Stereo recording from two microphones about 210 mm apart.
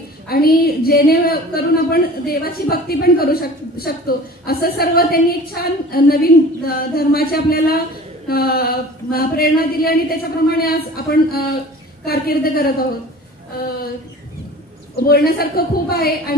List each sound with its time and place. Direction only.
0.3 s a woman's voice: 45° left (ahead or behind)
15.0 s a woman's voice: 45° left (ahead or behind)